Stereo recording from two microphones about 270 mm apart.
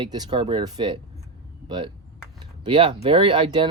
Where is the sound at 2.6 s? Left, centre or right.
Centre.